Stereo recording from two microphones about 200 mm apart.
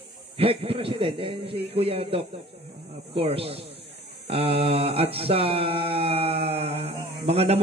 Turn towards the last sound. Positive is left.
turn(degrees=-30)  # may be behind; listen again after turning